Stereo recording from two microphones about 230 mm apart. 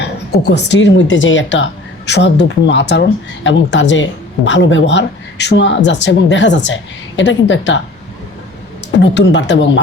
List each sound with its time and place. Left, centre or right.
0.0 s speech: left
9.0 s speech: left